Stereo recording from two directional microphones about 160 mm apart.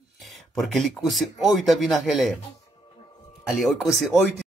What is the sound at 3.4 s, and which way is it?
Speech, centre (ahead or behind).